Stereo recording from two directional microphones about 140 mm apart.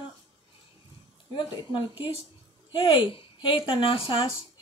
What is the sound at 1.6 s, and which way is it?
Speech, 35° left (ahead or behind).